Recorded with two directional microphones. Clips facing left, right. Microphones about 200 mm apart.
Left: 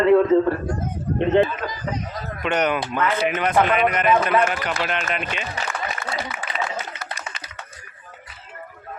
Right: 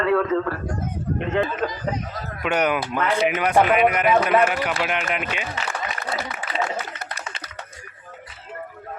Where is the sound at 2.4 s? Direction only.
5° right (ahead or behind).